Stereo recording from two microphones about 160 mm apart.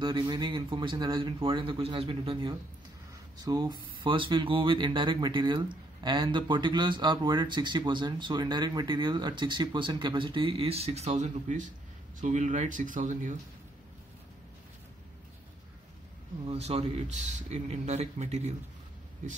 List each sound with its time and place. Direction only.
0.0 s speech: 30° right (ahead or behind)
3.3 s a man's voice: 25° right (ahead or behind); by 13.4 s 50° right (ahead or behind)
16.4 s a man's voice: 40° right (ahead or behind)